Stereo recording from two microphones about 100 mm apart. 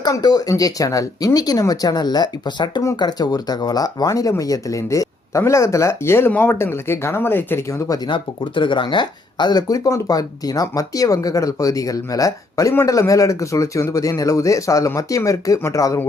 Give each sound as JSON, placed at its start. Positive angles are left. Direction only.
{"t": 0.0, "sound": "speech", "side_deg": 45}
{"t": 7.9, "sound": "speech", "side_deg": 45}